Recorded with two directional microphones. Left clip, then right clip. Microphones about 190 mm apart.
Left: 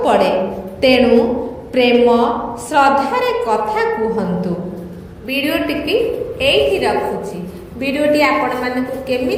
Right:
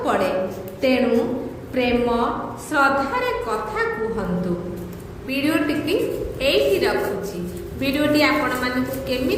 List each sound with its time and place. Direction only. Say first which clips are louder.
0.0 s a woman's voice: left 7 dB; 30° left (ahead or behind)
5.3 s a woman's voice: left 4 dB; 10° left (ahead or behind)